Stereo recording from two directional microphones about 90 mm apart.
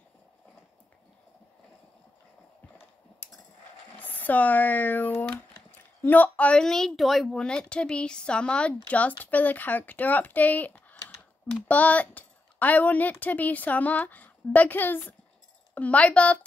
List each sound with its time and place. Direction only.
3.2 s a sound: 20° left (ahead or behind)
4.0 s speech: 20° left (ahead or behind)
6.6 s speech: 5° left (ahead or behind)